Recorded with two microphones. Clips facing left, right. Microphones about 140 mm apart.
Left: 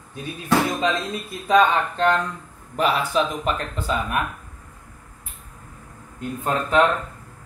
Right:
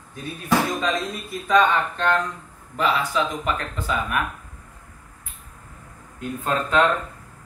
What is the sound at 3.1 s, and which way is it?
A man's voice, 25° left (ahead or behind).